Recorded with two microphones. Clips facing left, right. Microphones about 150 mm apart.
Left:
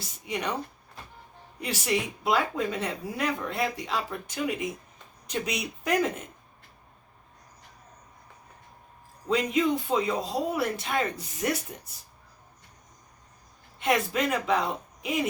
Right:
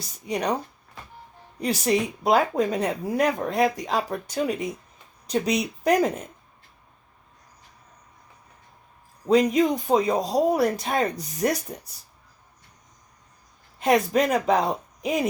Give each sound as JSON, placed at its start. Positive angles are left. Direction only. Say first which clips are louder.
{"t": 0.3, "sound": "speech", "louder": "right 5 dB", "side_deg": -35}
{"t": 1.6, "sound": "speech", "louder": "right 6 dB", "side_deg": -35}
{"t": 9.3, "sound": "speech", "louder": "right 6 dB", "side_deg": -40}
{"t": 13.7, "sound": "a woman's voice", "louder": "right 6 dB", "side_deg": -40}